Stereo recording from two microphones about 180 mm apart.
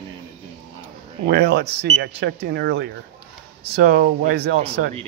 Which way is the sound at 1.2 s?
65° right (ahead or behind).